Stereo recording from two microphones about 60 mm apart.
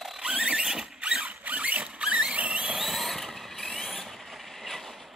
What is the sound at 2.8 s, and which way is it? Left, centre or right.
Vehicle, centre.